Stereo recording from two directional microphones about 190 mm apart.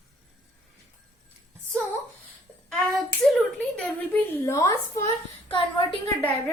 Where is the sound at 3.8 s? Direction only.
10° left (ahead or behind).